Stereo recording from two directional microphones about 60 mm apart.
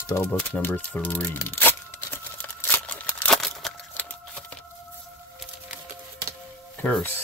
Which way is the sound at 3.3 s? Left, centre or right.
Centre.